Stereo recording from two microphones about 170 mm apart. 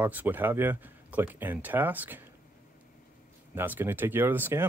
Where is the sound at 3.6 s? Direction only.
10° right (ahead or behind).